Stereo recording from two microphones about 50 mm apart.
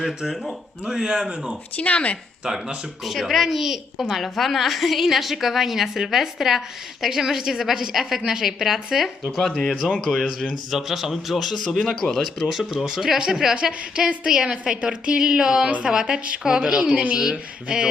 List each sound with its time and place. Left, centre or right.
0.0 s speech: centre
1.7 s speech: left
2.4 s speech: centre